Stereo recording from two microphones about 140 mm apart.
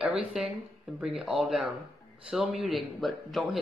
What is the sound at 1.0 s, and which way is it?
A man's voice, 5° right (ahead or behind).